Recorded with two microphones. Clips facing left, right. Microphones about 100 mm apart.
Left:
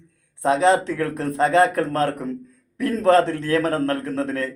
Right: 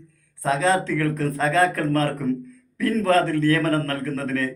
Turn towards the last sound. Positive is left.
turn(degrees=20)  # may be behind; listen again after turning